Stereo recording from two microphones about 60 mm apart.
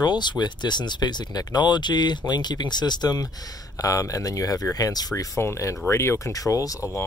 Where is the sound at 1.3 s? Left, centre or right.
Left.